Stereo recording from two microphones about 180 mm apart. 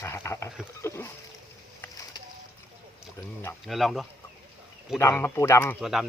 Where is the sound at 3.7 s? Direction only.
Centre (ahead or behind).